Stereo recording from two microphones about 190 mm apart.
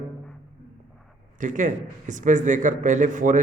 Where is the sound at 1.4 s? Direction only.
40° right (ahead or behind).